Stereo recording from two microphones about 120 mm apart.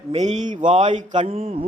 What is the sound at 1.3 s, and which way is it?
Speech, 55° right (ahead or behind).